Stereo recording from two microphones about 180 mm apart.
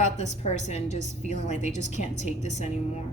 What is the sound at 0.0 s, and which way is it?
A woman's voice, 40° left (ahead or behind).